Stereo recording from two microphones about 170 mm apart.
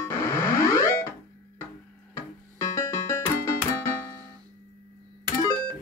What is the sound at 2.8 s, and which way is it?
Music, 15° left (ahead or behind).